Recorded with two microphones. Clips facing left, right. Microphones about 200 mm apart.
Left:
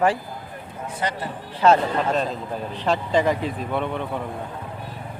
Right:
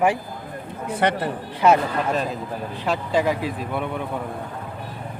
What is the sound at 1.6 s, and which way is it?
Speech, 10° right (ahead or behind).